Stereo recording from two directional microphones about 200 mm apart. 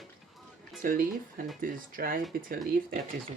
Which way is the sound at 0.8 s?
45° right (ahead or behind).